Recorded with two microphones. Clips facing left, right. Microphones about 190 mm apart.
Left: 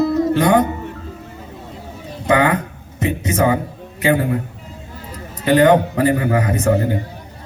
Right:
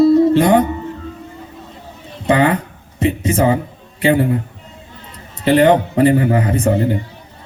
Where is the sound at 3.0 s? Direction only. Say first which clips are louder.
Right 2 dB; 30° right (ahead or behind).